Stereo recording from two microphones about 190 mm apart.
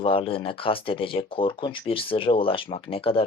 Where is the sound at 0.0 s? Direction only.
30° left (ahead or behind).